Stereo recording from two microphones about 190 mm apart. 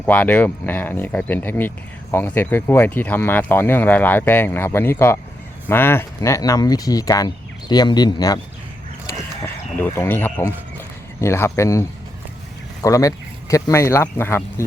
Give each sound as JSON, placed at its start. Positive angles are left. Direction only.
{"t": 0.0, "sound": "speech", "side_deg": 10}
{"t": 9.7, "sound": "speech", "side_deg": 10}